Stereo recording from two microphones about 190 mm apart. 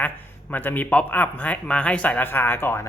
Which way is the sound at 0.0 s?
10° left (ahead or behind).